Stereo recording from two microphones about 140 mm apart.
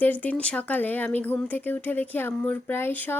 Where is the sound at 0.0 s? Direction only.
10° left (ahead or behind).